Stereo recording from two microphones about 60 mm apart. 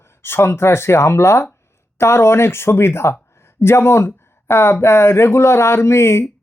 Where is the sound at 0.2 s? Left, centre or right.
Left.